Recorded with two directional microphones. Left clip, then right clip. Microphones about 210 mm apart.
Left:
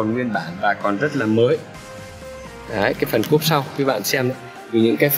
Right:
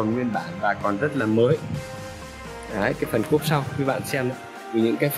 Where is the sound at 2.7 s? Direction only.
Centre (ahead or behind).